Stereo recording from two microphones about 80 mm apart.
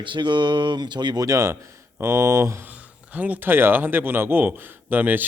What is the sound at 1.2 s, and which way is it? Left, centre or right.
Speech, right.